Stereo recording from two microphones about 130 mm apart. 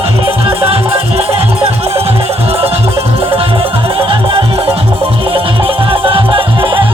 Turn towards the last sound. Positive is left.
turn(degrees=-40)  # may be behind; listen again after turning